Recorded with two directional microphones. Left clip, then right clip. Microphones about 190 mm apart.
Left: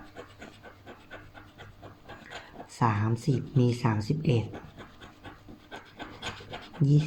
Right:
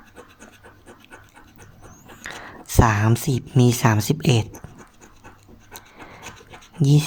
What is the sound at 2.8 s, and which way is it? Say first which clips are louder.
Speech: right 7 dB; 35° right (ahead or behind).